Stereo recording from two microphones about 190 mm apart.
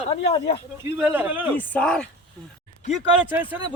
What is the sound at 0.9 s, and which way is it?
Speech, 10° right (ahead or behind).